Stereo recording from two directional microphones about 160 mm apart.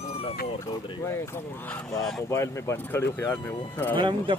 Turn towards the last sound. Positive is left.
turn(degrees=-30)  # may be behind; listen again after turning